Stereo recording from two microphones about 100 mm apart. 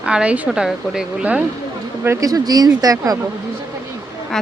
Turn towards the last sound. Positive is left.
turn(degrees=5)  # may be behind; listen again after turning